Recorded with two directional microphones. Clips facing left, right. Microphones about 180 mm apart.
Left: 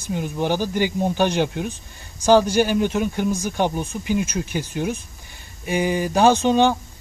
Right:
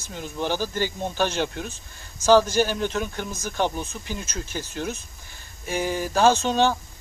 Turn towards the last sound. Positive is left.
turn(degrees=15)  # may be behind; listen again after turning